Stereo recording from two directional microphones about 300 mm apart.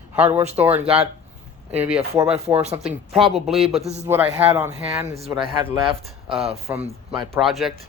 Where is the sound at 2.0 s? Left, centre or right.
Centre.